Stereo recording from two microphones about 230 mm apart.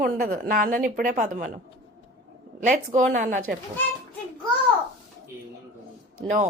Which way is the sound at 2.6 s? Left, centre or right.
Right.